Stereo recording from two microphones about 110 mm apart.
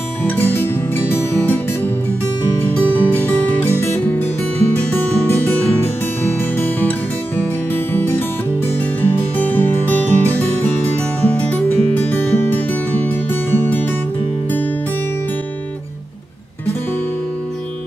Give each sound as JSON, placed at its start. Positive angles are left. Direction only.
{"t": 0.4, "sound": "music", "side_deg": 20}